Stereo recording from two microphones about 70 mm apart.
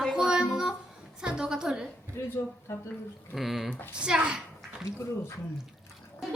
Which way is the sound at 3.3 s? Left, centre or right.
Centre.